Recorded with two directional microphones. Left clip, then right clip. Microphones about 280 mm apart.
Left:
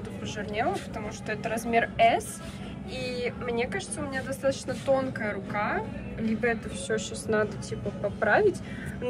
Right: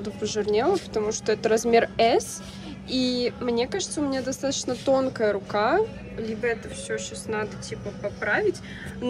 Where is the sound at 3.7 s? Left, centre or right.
Centre.